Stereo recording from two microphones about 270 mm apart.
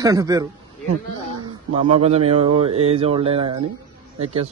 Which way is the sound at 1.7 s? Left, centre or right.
Right.